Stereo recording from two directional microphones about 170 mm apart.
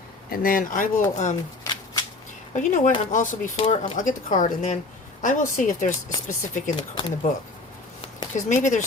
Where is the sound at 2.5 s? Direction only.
45° left (ahead or behind).